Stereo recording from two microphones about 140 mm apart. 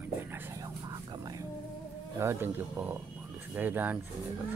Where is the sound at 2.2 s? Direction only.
15° right (ahead or behind).